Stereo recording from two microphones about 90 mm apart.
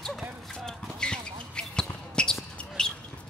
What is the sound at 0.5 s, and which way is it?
Basketball bounce, 5° left (ahead or behind).